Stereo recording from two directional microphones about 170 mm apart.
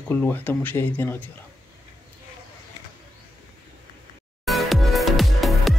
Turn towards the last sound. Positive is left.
turn(degrees=0)  # may be behind; listen again after turning